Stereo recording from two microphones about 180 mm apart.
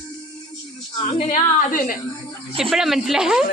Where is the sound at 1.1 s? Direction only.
45° left (ahead or behind).